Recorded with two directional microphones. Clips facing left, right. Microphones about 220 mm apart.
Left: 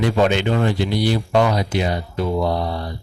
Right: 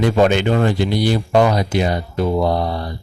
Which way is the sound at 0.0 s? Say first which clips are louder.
Right 3 dB; 50° right (ahead or behind).